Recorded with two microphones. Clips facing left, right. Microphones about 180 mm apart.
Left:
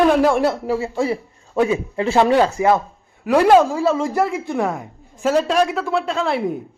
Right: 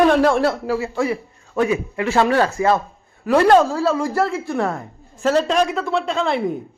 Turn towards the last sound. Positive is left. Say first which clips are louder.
# even
turn(degrees=5)  # may be behind; listen again after turning